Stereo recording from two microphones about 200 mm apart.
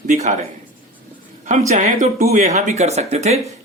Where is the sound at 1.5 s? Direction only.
40° right (ahead or behind).